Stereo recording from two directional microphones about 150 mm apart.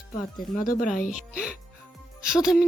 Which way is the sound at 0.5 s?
65° left (ahead or behind).